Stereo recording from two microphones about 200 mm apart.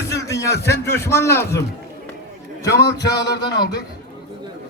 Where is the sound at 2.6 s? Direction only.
20° left (ahead or behind).